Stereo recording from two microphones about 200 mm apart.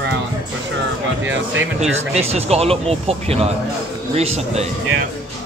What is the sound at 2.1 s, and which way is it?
A man's voice, 30° right (ahead or behind).